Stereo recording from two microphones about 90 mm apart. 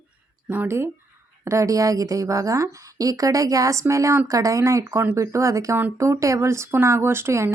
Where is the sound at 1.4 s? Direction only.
35° right (ahead or behind).